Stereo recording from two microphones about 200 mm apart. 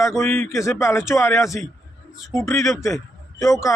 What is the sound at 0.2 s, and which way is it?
A man's voice, 10° left (ahead or behind).